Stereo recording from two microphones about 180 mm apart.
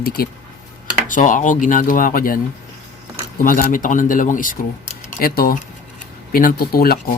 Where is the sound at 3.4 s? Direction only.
50° left (ahead or behind).